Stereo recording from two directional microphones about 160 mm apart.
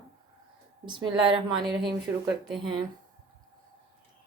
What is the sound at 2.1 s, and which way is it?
Speech, 15° right (ahead or behind).